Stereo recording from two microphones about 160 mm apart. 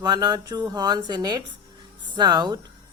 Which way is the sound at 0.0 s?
25° right (ahead or behind).